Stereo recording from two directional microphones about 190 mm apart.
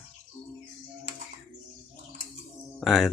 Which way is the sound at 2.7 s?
Centre (ahead or behind).